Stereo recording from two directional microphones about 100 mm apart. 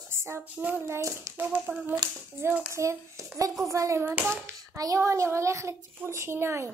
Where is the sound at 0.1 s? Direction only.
25° right (ahead or behind).